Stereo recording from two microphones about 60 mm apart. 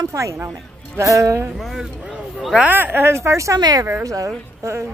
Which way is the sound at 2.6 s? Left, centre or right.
Right.